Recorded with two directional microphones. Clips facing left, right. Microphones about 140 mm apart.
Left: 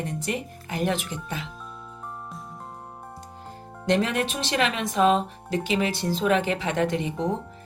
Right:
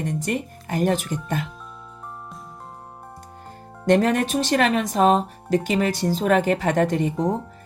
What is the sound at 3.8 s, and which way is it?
Speech, 45° right (ahead or behind).